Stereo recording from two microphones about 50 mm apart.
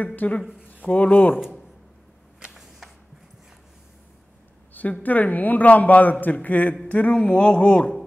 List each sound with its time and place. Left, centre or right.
0.0 s a man's voice: left
4.7 s a man's voice: left